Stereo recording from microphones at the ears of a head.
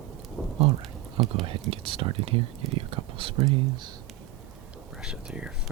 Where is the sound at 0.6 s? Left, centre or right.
Right.